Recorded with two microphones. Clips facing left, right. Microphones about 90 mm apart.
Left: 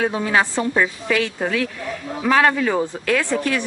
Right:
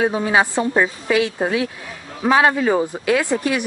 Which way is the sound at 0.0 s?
15° right (ahead or behind).